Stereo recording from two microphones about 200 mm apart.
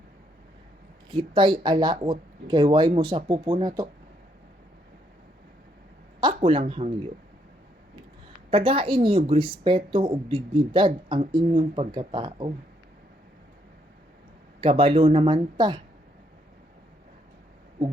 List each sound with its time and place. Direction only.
1.1 s speech: 25° right (ahead or behind)
6.1 s speech: 25° right (ahead or behind)
8.4 s speech: 25° right (ahead or behind)
14.6 s speech: 25° right (ahead or behind)